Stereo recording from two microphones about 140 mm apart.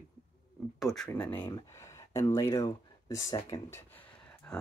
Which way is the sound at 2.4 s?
20° left (ahead or behind).